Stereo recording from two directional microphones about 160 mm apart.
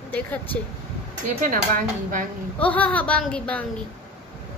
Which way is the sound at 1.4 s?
55° right (ahead or behind).